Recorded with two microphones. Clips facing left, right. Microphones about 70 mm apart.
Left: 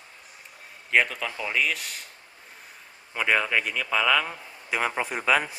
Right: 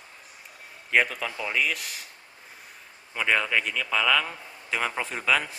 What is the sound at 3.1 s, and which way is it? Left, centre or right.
A man's voice, centre.